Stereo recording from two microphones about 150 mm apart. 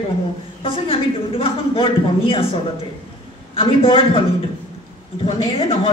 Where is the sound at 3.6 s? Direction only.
35° left (ahead or behind).